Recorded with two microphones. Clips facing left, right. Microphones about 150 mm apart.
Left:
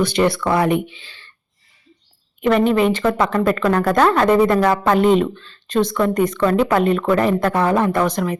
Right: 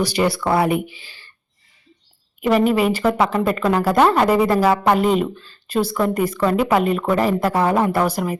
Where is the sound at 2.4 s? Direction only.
5° right (ahead or behind).